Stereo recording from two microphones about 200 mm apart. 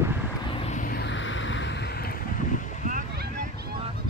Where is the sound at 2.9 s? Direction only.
50° right (ahead or behind).